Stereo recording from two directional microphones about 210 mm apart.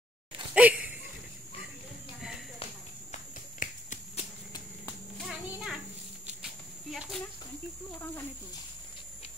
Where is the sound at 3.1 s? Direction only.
35° left (ahead or behind).